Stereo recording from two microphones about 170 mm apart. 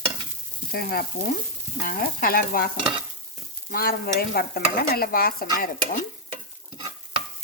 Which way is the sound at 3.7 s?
60° left (ahead or behind).